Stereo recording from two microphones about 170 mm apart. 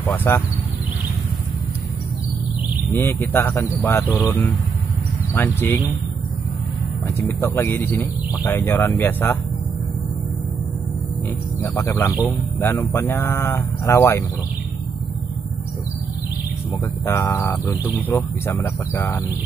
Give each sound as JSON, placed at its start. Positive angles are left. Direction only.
{"t": 0.0, "sound": "speech", "side_deg": 10}
{"t": 2.9, "sound": "speech", "side_deg": 10}
{"t": 7.2, "sound": "speech", "side_deg": 15}
{"t": 11.6, "sound": "speech", "side_deg": 15}
{"t": 17.0, "sound": "speech", "side_deg": 15}